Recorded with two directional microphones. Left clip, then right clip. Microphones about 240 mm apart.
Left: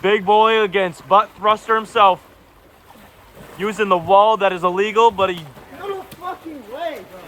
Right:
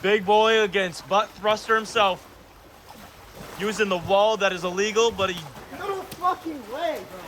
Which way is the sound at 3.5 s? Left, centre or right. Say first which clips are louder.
Left 7 dB; left.